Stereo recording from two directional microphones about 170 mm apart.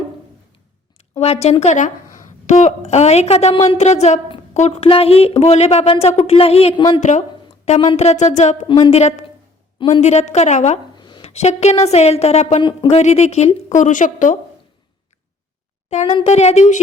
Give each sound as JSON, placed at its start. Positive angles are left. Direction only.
{"t": 1.2, "sound": "a woman's voice", "side_deg": 40}
{"t": 7.0, "sound": "a sound", "side_deg": 45}
{"t": 7.9, "sound": "a woman's voice", "side_deg": 40}
{"t": 8.6, "sound": "a woman's voice", "side_deg": 30}
{"t": 10.0, "sound": "a woman's voice", "side_deg": 40}
{"t": 10.9, "sound": "a woman's voice", "side_deg": 25}
{"t": 16.0, "sound": "a woman's voice", "side_deg": 35}